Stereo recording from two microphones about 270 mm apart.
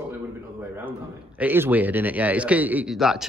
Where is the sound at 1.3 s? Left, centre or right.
Centre.